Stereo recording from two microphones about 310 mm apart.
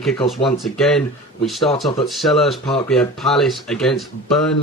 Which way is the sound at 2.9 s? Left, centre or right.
Centre.